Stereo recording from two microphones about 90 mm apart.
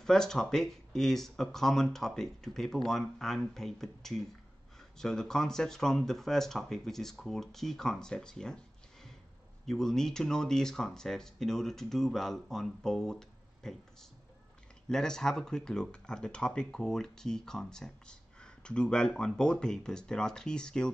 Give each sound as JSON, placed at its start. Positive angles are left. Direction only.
{"t": 0.0, "sound": "speech", "side_deg": 5}
{"t": 9.7, "sound": "speech", "side_deg": 5}
{"t": 14.9, "sound": "speech", "side_deg": 5}